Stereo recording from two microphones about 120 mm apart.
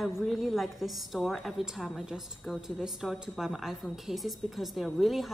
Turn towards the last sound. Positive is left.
turn(degrees=0)  # may be behind; listen again after turning